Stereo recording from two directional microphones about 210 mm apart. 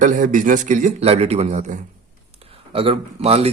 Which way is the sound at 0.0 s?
35° right (ahead or behind).